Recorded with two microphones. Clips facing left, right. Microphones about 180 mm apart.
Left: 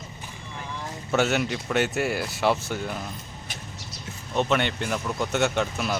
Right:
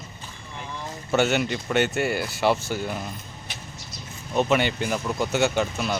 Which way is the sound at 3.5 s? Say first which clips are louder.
Even; 45° left (ahead or behind).